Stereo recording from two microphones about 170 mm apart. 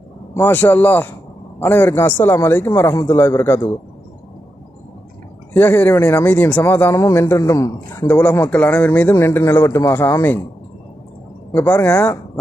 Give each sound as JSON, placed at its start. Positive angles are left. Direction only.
{"t": 0.4, "sound": "speech", "side_deg": 10}
{"t": 5.5, "sound": "speech", "side_deg": 10}
{"t": 11.5, "sound": "speech", "side_deg": 5}